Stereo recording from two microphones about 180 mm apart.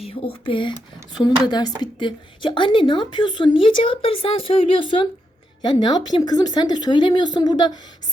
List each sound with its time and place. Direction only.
0.0 s a woman's voice: 30° left (ahead or behind)